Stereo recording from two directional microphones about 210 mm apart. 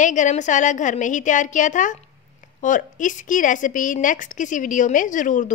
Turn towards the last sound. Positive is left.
turn(degrees=35)  # may be behind; listen again after turning